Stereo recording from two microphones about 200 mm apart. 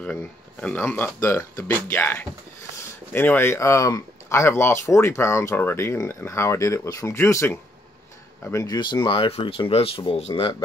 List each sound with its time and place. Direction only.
0.0 s speech: 5° left (ahead or behind); by 10.5 s 30° left (ahead or behind)